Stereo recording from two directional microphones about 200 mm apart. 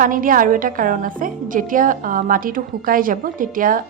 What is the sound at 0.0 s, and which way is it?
A woman's voice, 45° right (ahead or behind).